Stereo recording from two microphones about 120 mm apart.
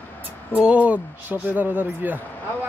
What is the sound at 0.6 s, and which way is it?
Speech, 10° right (ahead or behind).